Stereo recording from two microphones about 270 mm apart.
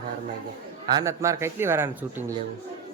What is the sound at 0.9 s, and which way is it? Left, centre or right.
Speech, centre.